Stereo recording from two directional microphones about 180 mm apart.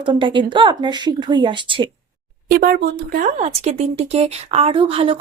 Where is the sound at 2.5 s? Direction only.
55° right (ahead or behind); by 5.2 s 30° right (ahead or behind).